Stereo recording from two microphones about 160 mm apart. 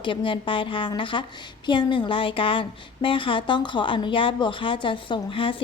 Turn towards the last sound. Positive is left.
turn(degrees=35)  # may be behind; listen again after turning